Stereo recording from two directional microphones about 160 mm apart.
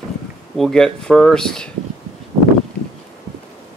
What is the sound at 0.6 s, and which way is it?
Speech, 5° left (ahead or behind).